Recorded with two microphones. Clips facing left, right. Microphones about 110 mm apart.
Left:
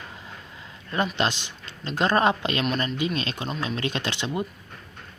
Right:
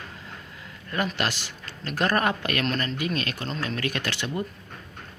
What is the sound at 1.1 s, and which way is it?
Speech, 20° left (ahead or behind).